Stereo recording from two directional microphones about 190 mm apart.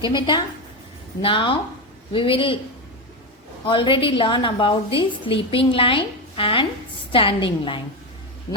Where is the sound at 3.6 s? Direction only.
25° left (ahead or behind).